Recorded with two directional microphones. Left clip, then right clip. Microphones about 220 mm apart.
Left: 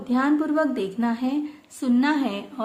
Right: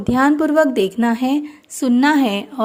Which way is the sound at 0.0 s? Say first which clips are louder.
Right 7 dB; 35° right (ahead or behind).